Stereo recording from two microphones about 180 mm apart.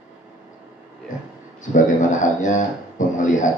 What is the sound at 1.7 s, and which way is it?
A man's voice, 45° left (ahead or behind).